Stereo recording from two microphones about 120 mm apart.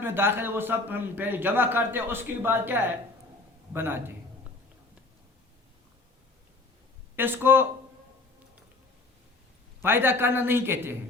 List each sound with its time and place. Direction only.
0.0 s a man's voice: 20° right (ahead or behind)
7.2 s a man's voice: 15° right (ahead or behind)
9.8 s a man's voice: 20° right (ahead or behind)